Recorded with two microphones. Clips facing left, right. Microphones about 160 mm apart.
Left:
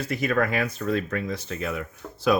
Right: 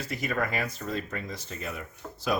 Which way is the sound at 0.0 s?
60° left (ahead or behind).